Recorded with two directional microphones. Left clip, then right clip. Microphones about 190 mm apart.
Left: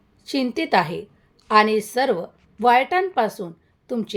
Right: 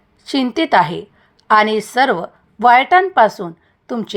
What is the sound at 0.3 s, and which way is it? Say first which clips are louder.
A woman's voice: right 6 dB; 15° right (ahead or behind).